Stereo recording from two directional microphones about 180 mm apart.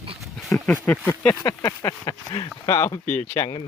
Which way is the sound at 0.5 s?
10° left (ahead or behind).